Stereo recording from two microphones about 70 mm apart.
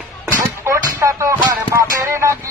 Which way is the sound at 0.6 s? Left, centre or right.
Right.